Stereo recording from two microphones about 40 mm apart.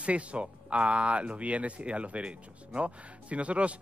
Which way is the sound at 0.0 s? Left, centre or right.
Right.